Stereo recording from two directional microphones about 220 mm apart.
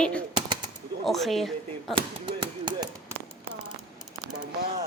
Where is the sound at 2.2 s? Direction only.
20° right (ahead or behind).